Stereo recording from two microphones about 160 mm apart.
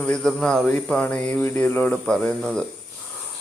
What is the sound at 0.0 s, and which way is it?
Speech, 5° left (ahead or behind).